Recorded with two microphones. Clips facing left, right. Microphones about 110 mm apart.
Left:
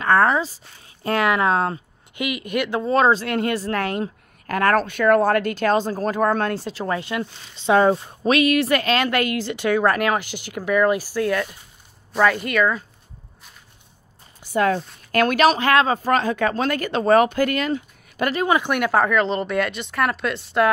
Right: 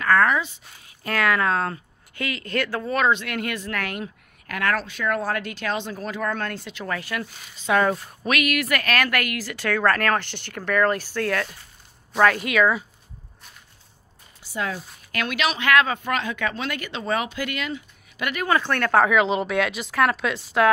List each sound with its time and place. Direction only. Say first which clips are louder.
0.0 s speech: left 2 dB; 30° left (ahead or behind); by 12.8 s 5° right (ahead or behind)
14.4 s a woman's voice: left 9 dB; 55° left (ahead or behind)
18.3 s speech: left 2 dB; 20° left (ahead or behind)
18.9 s speech: right 2 dB; centre (ahead or behind)